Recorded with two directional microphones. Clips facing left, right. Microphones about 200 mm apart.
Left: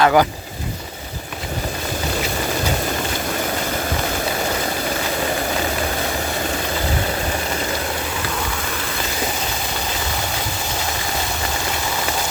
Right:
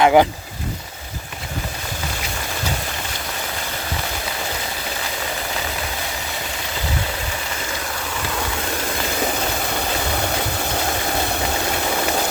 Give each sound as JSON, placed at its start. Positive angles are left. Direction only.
{"t": 0.0, "sound": "speech", "side_deg": -20}